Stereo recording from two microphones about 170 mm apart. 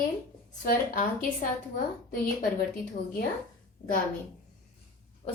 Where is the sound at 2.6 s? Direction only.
50° left (ahead or behind).